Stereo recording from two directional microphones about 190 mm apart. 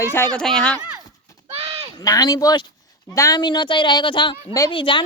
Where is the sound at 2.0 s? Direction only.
20° left (ahead or behind).